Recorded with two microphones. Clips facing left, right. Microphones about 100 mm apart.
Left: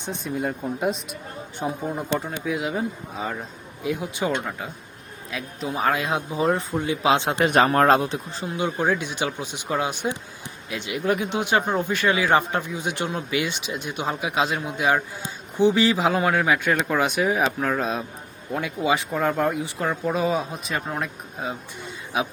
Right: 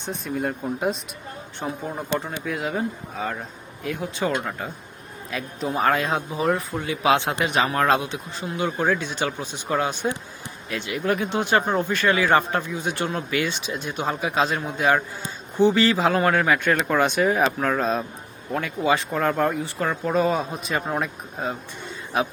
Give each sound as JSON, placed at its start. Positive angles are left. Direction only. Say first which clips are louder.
{"t": 0.0, "sound": "speech", "louder": "even", "side_deg": 0}
{"t": 4.3, "sound": "speech", "louder": "right 1 dB", "side_deg": 0}
{"t": 6.1, "sound": "speech", "louder": "even", "side_deg": 15}
{"t": 6.4, "sound": "speech", "louder": "left 2 dB", "side_deg": 25}
{"t": 7.4, "sound": "speech", "louder": "left 6 dB", "side_deg": 45}
{"t": 8.4, "sound": "speech", "louder": "even", "side_deg": 20}
{"t": 20.1, "sound": "speech", "louder": "right 2 dB", "side_deg": 5}